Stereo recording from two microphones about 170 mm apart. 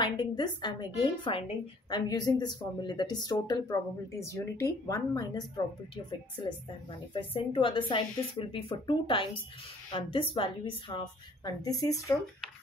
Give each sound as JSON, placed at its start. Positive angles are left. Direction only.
{"t": 0.0, "sound": "a woman's voice", "side_deg": 25}
{"t": 7.2, "sound": "a woman's voice", "side_deg": 30}